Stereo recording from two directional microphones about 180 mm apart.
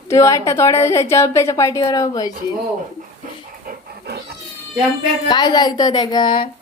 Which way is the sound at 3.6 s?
65° right (ahead or behind).